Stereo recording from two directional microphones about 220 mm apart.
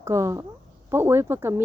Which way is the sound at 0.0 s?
15° right (ahead or behind).